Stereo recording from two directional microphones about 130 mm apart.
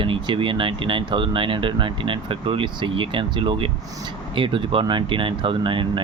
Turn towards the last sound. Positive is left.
turn(degrees=-40)  # may be behind; listen again after turning